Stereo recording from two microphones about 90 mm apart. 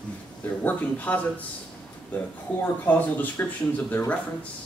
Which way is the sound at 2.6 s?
20° left (ahead or behind).